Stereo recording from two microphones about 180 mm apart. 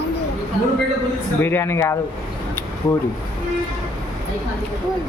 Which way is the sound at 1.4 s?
10° left (ahead or behind).